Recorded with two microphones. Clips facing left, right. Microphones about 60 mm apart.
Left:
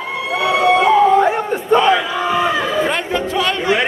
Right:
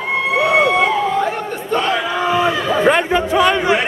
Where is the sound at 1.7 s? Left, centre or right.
Centre.